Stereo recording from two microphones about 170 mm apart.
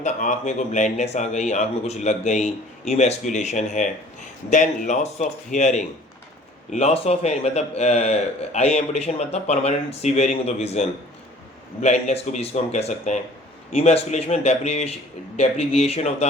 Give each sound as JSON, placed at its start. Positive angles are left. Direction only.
{"t": 0.0, "sound": "a man's voice", "side_deg": 45}